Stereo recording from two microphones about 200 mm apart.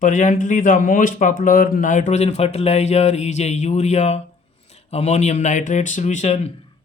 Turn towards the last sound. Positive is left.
turn(degrees=35)  # may be behind; listen again after turning